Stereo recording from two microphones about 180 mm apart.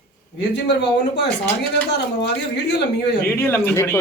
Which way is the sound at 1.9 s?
70° left (ahead or behind).